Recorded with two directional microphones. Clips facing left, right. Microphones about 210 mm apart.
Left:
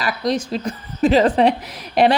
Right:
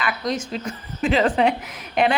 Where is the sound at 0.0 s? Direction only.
35° left (ahead or behind).